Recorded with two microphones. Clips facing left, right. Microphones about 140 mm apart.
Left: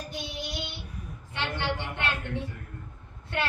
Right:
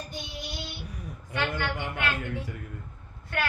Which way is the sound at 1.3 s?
25° left (ahead or behind).